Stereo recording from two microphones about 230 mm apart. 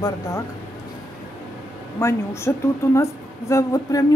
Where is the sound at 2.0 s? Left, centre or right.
Centre.